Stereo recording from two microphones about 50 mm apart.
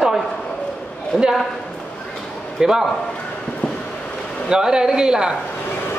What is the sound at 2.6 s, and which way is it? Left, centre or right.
Speech, centre.